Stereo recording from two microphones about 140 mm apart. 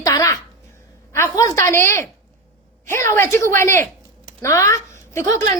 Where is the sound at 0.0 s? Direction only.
25° left (ahead or behind).